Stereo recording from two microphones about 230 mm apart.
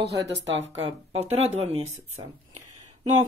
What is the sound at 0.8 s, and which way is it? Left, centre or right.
Speech, right.